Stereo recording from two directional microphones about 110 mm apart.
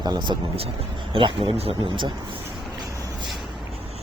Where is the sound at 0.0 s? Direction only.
40° right (ahead or behind).